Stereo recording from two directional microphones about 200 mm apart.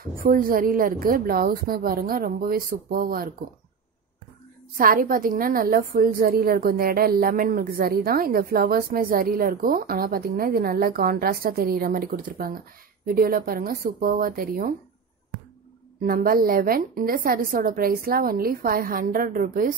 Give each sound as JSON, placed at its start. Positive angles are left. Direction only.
{"t": 0.0, "sound": "a woman's voice", "side_deg": -45}
{"t": 4.7, "sound": "a woman's voice", "side_deg": -45}
{"t": 16.0, "sound": "a woman's voice", "side_deg": -45}